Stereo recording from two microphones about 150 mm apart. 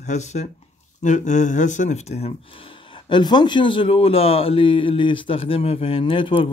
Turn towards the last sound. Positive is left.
turn(degrees=35)  # may be behind; listen again after turning